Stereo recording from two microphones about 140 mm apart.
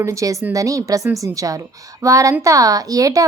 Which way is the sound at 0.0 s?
25° right (ahead or behind).